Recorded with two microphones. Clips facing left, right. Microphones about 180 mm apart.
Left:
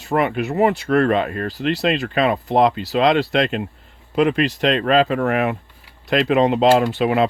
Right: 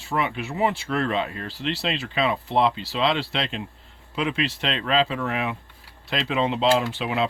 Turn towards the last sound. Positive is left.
turn(degrees=55)  # may be behind; listen again after turning